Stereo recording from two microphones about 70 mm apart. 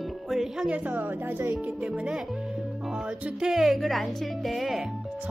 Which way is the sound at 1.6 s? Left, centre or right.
Centre.